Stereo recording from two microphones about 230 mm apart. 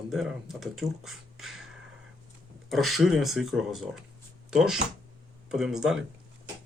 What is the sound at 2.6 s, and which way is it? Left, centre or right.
Speech, centre.